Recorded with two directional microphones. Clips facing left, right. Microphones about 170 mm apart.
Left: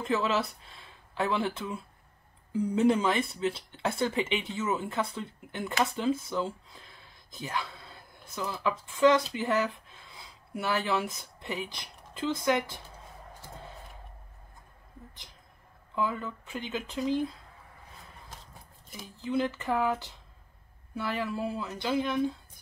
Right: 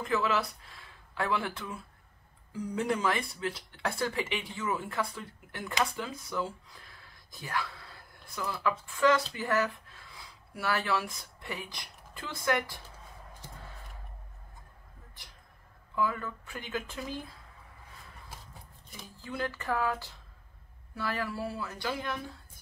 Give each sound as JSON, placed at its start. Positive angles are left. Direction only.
{"t": 0.0, "sound": "speech", "side_deg": 25}
{"t": 15.9, "sound": "speech", "side_deg": 20}
{"t": 19.2, "sound": "speech", "side_deg": 20}